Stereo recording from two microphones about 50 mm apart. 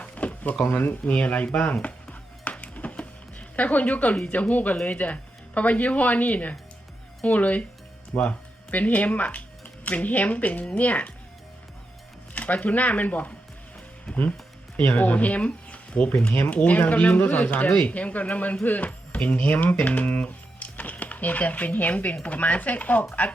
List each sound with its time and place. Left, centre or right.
0.0 s drawer open or close: left
0.7 s speech: left
1.0 s speech: left
1.5 s music: left
4.3 s speech: left
12.3 s speech: left